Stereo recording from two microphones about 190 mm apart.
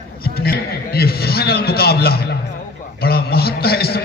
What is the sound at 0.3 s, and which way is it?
A man's voice, 55° left (ahead or behind).